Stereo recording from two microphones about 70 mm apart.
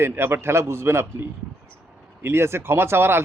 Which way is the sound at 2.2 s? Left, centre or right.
Right.